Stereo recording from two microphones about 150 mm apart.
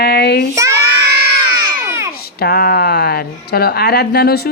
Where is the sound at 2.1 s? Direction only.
90° left.